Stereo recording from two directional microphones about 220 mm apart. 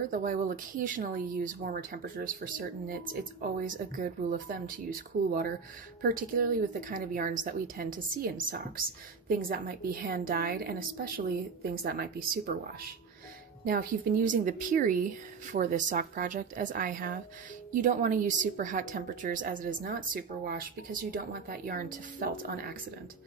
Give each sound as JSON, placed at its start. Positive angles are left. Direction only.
{"t": 0.1, "sound": "a woman's voice", "side_deg": -35}
{"t": 6.0, "sound": "a woman's voice", "side_deg": -40}
{"t": 9.4, "sound": "a woman's voice", "side_deg": -40}
{"t": 13.7, "sound": "a woman's voice", "side_deg": -40}